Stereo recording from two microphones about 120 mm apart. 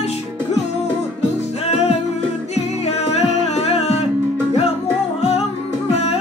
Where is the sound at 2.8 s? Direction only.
65° left (ahead or behind).